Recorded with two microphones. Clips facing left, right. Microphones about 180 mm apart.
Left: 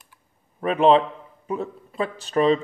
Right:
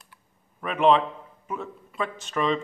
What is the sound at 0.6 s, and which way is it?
A man's voice, 35° left (ahead or behind).